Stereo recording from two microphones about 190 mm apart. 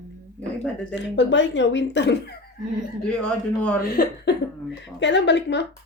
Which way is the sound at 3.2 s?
5° left (ahead or behind).